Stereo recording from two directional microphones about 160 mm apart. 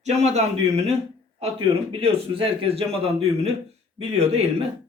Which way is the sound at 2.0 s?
35° right (ahead or behind).